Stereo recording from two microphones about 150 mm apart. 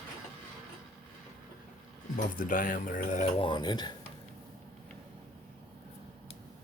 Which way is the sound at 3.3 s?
30° left (ahead or behind).